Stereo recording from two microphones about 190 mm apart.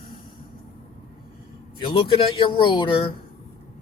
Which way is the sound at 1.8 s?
25° left (ahead or behind).